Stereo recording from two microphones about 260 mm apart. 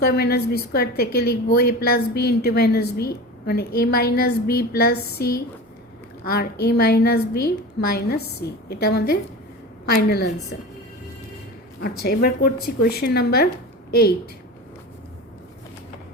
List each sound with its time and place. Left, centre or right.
0.0 s a woman's voice: left
11.8 s a woman's voice: left